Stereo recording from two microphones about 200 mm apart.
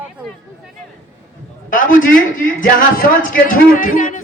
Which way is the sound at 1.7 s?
40° left (ahead or behind).